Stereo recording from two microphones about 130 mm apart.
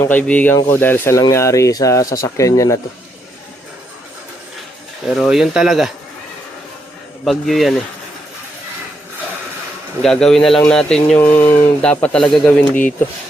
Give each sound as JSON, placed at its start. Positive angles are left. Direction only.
{"t": 0.0, "sound": "mantra", "side_deg": 15}
{"t": 1.2, "sound": "speech", "side_deg": 25}
{"t": 5.0, "sound": "speech", "side_deg": -5}
{"t": 7.3, "sound": "speech", "side_deg": 0}
{"t": 10.0, "sound": "speech", "side_deg": 5}
{"t": 10.7, "sound": "mantra", "side_deg": 5}
{"t": 11.9, "sound": "speech", "side_deg": 10}
{"t": 12.5, "sound": "mantra", "side_deg": 10}